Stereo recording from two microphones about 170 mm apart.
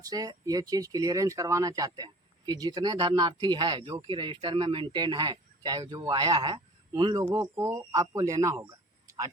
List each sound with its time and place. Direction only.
0.0 s speech: 20° right (ahead or behind)